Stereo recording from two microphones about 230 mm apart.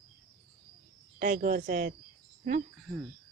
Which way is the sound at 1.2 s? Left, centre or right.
Right.